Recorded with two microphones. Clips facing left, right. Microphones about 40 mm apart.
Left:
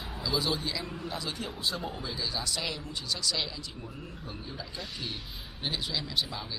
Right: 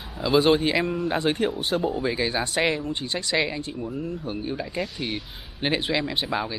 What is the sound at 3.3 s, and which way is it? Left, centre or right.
Speech, right.